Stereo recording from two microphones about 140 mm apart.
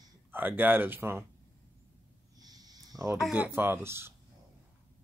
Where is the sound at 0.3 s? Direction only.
15° right (ahead or behind).